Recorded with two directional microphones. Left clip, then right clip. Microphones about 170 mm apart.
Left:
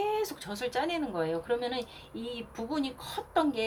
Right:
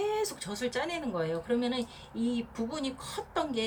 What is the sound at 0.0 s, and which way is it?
Speech, 40° left (ahead or behind).